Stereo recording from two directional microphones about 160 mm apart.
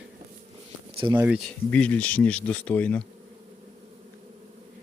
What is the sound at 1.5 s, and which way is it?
Speech, 10° left (ahead or behind).